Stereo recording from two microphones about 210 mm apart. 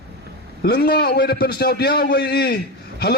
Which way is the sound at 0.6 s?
50° left (ahead or behind).